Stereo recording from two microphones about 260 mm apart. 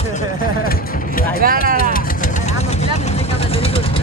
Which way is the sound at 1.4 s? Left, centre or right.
Right.